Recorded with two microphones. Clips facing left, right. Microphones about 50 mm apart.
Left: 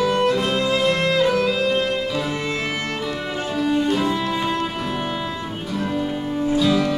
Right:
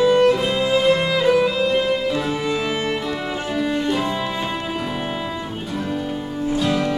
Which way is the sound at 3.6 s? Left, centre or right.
Centre.